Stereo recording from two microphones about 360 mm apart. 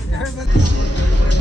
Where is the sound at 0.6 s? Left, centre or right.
Left.